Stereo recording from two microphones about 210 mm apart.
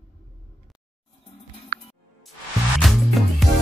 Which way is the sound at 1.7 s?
40° right (ahead or behind).